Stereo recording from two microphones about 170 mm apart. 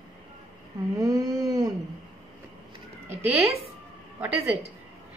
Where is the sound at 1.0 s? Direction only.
20° right (ahead or behind).